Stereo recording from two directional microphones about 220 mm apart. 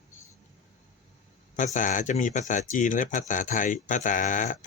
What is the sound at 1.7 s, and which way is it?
Speech, 35° left (ahead or behind).